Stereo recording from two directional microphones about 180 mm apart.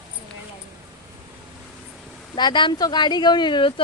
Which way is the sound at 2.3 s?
25° left (ahead or behind).